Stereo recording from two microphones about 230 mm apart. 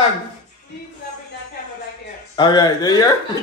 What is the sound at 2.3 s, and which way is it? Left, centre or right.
Speech, centre.